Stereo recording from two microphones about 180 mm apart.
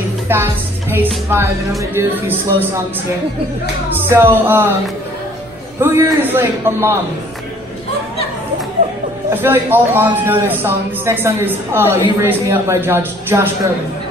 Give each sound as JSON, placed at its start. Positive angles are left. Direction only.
{"t": 0.3, "sound": "a man's voice", "side_deg": -10}
{"t": 4.1, "sound": "a man's voice", "side_deg": -10}
{"t": 5.8, "sound": "a man's voice", "side_deg": -10}
{"t": 9.3, "sound": "a man's voice", "side_deg": -10}